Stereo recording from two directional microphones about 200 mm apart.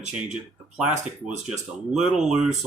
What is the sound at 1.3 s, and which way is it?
Speech, 35° right (ahead or behind).